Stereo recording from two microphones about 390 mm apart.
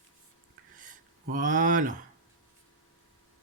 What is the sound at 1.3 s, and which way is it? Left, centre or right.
Speech, centre.